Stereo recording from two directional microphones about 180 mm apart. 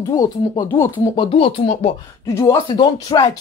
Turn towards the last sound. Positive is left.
turn(degrees=20)  # may be behind; listen again after turning